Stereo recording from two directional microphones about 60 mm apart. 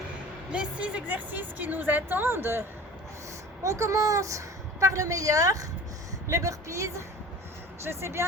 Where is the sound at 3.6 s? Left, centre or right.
Right.